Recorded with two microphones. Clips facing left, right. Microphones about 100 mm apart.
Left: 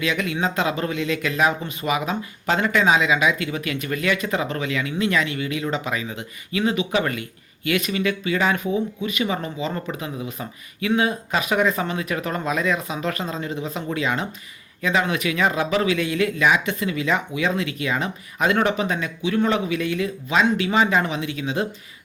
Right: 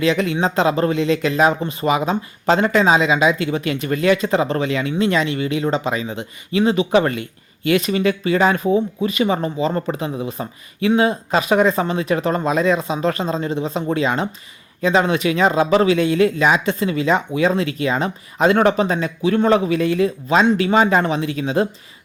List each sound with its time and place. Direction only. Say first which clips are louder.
0.0 s speech: right 6 dB; 30° right (ahead or behind)